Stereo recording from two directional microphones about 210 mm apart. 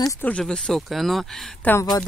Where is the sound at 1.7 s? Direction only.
20° left (ahead or behind).